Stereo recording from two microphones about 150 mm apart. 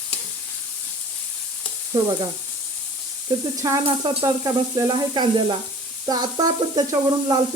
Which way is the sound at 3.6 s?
20° right (ahead or behind).